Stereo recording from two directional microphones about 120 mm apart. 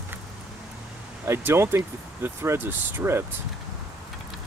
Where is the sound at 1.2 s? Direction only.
20° right (ahead or behind).